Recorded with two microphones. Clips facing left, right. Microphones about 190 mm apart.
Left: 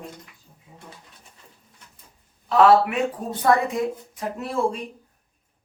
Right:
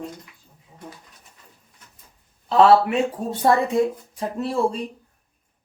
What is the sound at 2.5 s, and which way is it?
A woman's voice, 30° right (ahead or behind).